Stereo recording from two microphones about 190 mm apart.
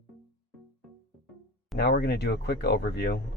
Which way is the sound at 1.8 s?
60° left (ahead or behind).